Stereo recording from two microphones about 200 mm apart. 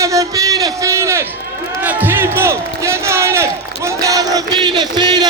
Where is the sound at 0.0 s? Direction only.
15° right (ahead or behind).